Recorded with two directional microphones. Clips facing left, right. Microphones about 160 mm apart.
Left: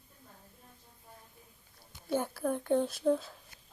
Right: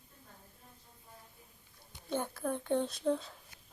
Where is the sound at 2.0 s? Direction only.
5° left (ahead or behind).